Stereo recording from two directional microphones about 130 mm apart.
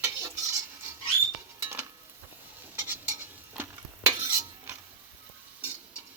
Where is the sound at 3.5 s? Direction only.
15° right (ahead or behind).